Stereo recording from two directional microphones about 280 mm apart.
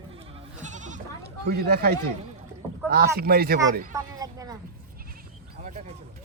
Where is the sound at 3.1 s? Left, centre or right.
Right.